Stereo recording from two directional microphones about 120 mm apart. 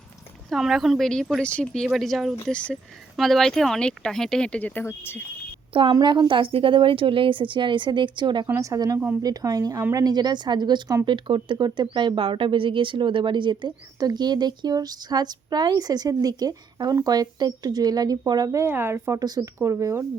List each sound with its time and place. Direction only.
0.5 s speech: centre (ahead or behind); by 5.2 s 20° left (ahead or behind)
5.9 s speech: 35° right (ahead or behind)
8.4 s speech: 25° right (ahead or behind)